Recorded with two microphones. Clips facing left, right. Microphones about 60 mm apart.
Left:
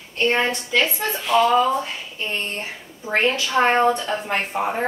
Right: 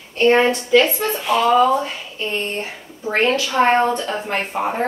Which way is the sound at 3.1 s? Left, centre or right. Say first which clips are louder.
Right 2 dB; centre.